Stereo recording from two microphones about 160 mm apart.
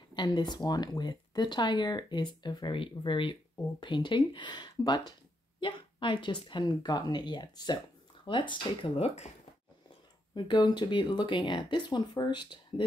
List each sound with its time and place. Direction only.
0.1 s speech: 25° left (ahead or behind)
10.3 s speech: 30° left (ahead or behind)